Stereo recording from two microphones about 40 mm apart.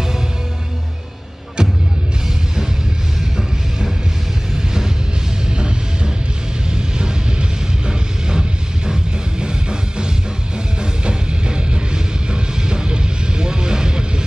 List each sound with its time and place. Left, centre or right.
1.6 s music: centre
4.6 s music: centre
6.7 s vehicle: centre
10.8 s music: right